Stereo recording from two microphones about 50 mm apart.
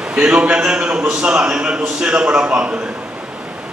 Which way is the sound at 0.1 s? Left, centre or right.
Centre.